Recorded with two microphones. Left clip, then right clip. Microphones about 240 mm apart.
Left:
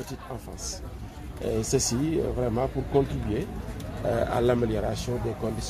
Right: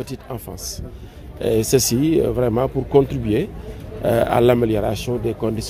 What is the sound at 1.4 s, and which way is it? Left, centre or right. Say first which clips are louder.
Speech: right 9 dB; right.